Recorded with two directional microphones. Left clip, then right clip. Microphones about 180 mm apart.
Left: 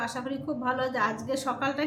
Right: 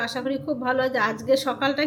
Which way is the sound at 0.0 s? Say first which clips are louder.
Right 6 dB; 15° right (ahead or behind).